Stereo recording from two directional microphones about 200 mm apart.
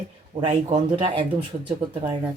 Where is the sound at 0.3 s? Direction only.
35° right (ahead or behind).